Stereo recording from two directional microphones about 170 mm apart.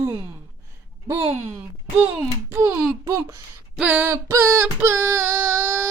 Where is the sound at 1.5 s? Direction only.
10° right (ahead or behind).